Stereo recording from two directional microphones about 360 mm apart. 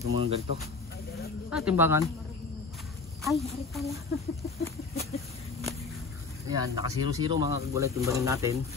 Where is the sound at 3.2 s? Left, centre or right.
Centre.